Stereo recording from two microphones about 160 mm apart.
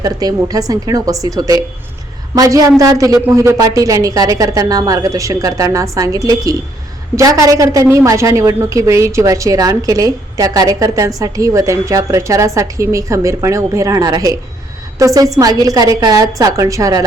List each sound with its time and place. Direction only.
0.0 s a woman's voice: 25° right (ahead or behind)